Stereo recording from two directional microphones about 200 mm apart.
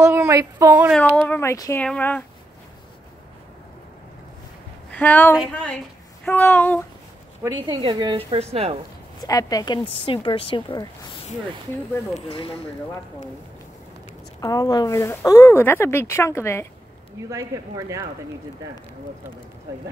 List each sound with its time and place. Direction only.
0.0 s speech: 15° right (ahead or behind)
0.9 s speech: 5° left (ahead or behind)
4.9 s speech: 10° left (ahead or behind)
7.6 s a woman's voice: 25° right (ahead or behind)
9.2 s a woman's voice: 20° left (ahead or behind)
12.3 s a woman's voice: 25° left (ahead or behind)
14.4 s speech: 20° left (ahead or behind)
17.3 s speech: 15° right (ahead or behind)